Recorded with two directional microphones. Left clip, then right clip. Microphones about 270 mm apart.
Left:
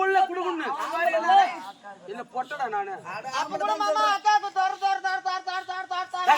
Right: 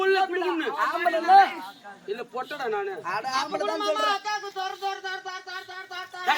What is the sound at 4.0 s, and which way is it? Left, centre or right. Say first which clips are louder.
Speech: left 5 dB; left.